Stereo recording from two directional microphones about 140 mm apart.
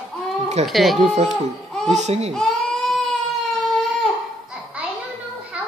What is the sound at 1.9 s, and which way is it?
Speech, 55° right (ahead or behind).